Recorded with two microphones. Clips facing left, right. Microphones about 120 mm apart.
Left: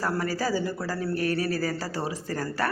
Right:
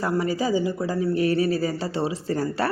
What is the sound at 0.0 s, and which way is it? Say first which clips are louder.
Speech: right 4 dB; 20° right (ahead or behind).